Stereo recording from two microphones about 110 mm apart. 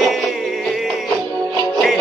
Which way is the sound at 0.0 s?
Centre (ahead or behind).